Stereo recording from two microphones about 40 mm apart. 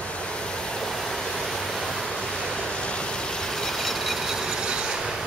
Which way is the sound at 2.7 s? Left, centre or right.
Left.